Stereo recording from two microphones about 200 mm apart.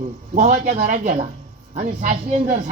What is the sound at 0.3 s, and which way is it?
A man's voice, 40° right (ahead or behind).